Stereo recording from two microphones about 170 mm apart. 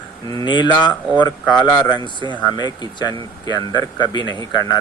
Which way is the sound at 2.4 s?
25° left (ahead or behind).